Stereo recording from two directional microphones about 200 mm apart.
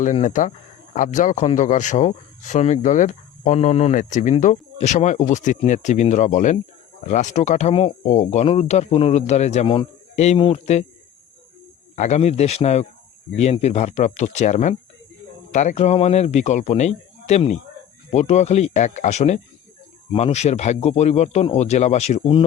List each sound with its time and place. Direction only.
0.0 s speech: 35° left (ahead or behind)
11.9 s speech: 35° left (ahead or behind)